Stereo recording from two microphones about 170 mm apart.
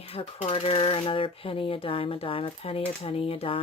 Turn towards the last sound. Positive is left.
turn(degrees=35)  # may be behind; listen again after turning